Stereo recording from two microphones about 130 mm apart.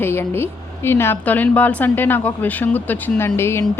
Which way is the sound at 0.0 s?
20° left (ahead or behind).